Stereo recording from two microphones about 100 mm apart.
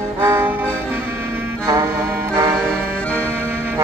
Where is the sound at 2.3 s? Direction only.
25° right (ahead or behind).